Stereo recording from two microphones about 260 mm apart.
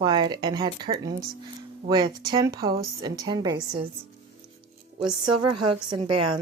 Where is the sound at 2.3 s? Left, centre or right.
Centre.